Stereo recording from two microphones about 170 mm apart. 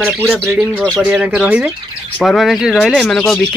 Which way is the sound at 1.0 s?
5° right (ahead or behind).